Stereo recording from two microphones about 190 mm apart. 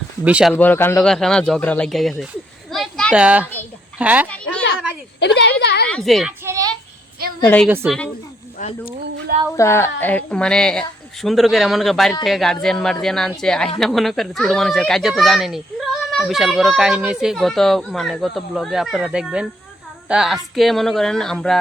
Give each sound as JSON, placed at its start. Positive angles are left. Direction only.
{"t": 0.3, "sound": "speech", "side_deg": -5}
{"t": 0.5, "sound": "speech", "side_deg": 10}
{"t": 2.7, "sound": "children playing", "side_deg": 0}
{"t": 3.2, "sound": "a woman's voice", "side_deg": -5}
{"t": 5.2, "sound": "a woman's voice", "side_deg": 60}
{"t": 5.9, "sound": "speech", "side_deg": 0}
{"t": 6.4, "sound": "a sound", "side_deg": -15}
{"t": 7.4, "sound": "a woman's voice", "side_deg": 10}
{"t": 7.7, "sound": "a woman's voice", "side_deg": -10}
{"t": 8.5, "sound": "wild animals", "side_deg": 45}
{"t": 9.6, "sound": "speech", "side_deg": 15}